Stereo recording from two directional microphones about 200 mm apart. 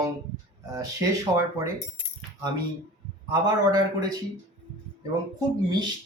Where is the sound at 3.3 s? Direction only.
20° right (ahead or behind).